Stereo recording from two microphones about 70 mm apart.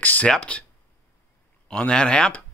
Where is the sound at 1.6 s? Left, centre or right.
Centre.